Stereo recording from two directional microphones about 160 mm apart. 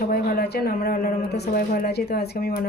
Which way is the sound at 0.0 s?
70° left (ahead or behind).